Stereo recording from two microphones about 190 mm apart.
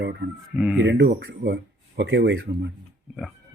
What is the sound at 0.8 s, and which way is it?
A man's voice, 65° right (ahead or behind).